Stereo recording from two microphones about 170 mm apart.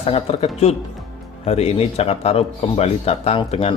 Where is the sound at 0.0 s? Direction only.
35° left (ahead or behind).